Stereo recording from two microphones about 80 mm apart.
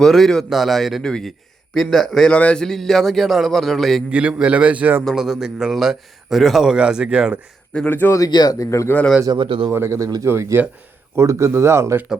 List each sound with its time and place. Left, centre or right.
0.0 s a man's voice: centre
4.1 s a man's voice: centre
5.1 s a man's voice: centre
7.9 s speech: left
8.3 s speech: left
8.5 s speech: left
9.3 s speech: right
9.7 s speech: right